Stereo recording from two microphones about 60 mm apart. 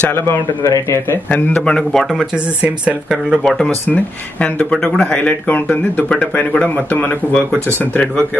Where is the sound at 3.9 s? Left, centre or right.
Left.